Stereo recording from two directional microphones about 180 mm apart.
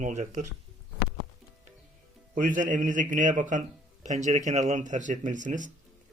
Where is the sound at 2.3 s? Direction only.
45° right (ahead or behind).